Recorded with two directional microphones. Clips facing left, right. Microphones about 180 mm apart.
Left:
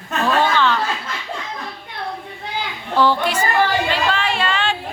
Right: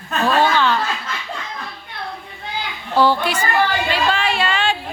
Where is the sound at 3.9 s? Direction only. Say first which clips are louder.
Right 1 dB; 10° right (ahead or behind).